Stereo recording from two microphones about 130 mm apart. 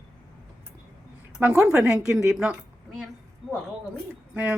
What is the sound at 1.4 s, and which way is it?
Speech, 10° right (ahead or behind).